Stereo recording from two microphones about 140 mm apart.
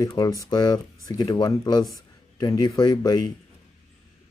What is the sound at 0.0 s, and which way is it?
Speech, 25° left (ahead or behind).